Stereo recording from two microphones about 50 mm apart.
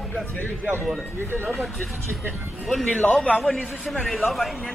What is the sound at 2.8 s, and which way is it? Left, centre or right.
Speech, left.